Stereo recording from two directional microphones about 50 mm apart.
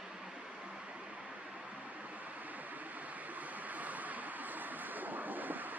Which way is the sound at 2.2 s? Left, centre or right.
Right.